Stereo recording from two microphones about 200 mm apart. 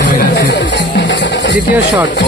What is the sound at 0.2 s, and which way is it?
Music, 60° left (ahead or behind).